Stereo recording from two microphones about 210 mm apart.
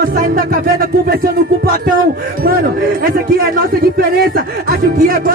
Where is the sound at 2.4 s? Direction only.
45° right (ahead or behind).